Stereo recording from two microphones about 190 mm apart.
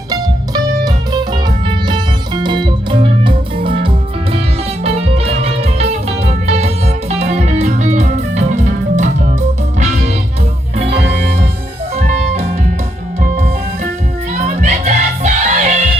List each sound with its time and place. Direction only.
0.1 s music: 20° right (ahead or behind); by 9.0 s 40° right (ahead or behind)
11.9 s music: 35° right (ahead or behind)
14.4 s music: 35° right (ahead or behind)